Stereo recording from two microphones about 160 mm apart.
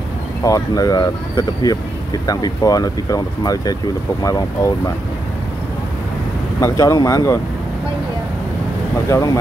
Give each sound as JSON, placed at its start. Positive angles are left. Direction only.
{"t": 0.4, "sound": "speech", "side_deg": 20}
{"t": 6.6, "sound": "speech", "side_deg": 20}
{"t": 9.1, "sound": "speech", "side_deg": 20}